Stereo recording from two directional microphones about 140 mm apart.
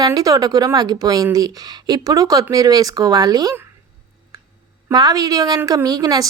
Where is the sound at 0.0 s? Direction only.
25° right (ahead or behind).